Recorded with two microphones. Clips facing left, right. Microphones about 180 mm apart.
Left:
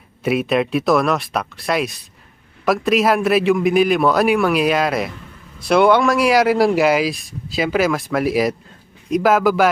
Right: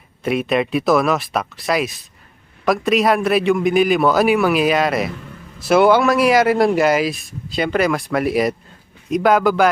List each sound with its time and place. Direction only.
0.2 s speech: centre (ahead or behind)